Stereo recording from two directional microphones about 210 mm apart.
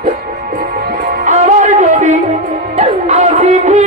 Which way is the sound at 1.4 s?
35° right (ahead or behind).